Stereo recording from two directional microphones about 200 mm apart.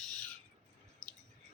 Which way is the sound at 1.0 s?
15° right (ahead or behind).